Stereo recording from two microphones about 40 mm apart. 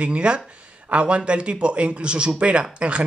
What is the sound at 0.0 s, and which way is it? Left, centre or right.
Speech, right.